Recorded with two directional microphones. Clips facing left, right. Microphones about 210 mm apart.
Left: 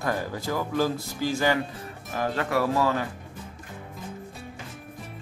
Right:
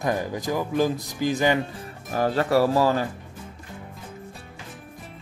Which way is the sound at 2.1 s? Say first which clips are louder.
Right 5 dB; 35° right (ahead or behind).